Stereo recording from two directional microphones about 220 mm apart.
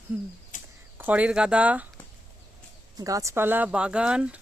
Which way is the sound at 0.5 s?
35° left (ahead or behind).